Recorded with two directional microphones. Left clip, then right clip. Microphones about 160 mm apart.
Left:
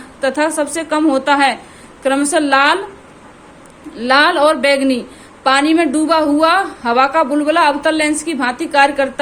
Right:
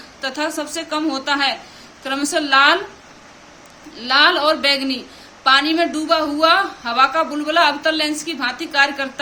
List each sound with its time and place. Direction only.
0.2 s a woman's voice: 40° left (ahead or behind)
3.9 s a woman's voice: 35° left (ahead or behind)